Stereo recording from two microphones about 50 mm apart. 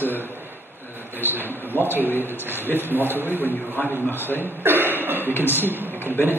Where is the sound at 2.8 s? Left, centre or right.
Right.